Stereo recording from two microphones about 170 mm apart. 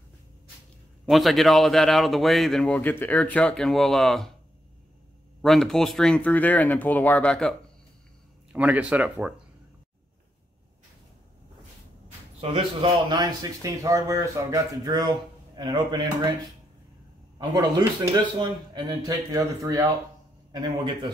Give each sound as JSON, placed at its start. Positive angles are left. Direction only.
{"t": 1.0, "sound": "speech", "side_deg": 0}
{"t": 5.4, "sound": "speech", "side_deg": 0}
{"t": 8.5, "sound": "speech", "side_deg": -10}
{"t": 12.4, "sound": "speech", "side_deg": -35}
{"t": 17.4, "sound": "speech", "side_deg": -25}